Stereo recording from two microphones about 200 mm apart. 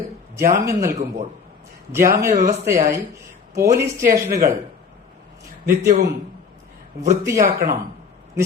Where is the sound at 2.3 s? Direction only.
50° right (ahead or behind).